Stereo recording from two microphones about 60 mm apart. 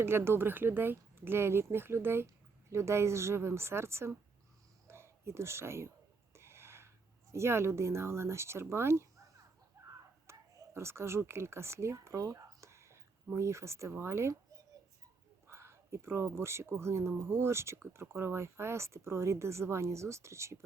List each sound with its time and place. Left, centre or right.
0.0 s speech: right
2.2 s speech: right
6.3 s gasp: right
7.3 s speech: right
10.3 s whispering: right
10.8 s speech: right
15.4 s speech: right